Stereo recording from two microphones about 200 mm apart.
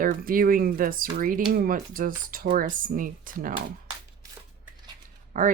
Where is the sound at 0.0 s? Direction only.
45° right (ahead or behind).